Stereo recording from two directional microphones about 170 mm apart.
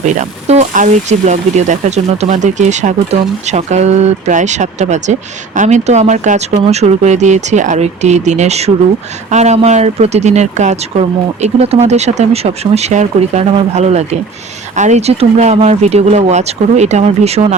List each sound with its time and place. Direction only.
0.0 s speech: 40° right (ahead or behind)